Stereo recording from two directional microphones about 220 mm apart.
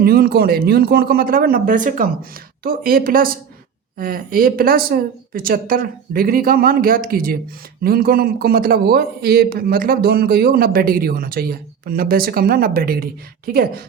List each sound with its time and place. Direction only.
0.0 s a man's voice: 40° right (ahead or behind)